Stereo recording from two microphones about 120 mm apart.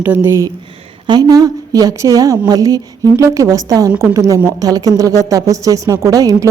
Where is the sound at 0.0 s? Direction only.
15° right (ahead or behind).